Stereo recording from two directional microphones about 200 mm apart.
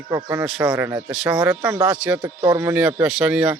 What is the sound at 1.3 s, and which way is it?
Speech, 15° right (ahead or behind).